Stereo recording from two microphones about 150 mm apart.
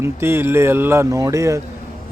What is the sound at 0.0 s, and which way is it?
A man's voice, 15° right (ahead or behind).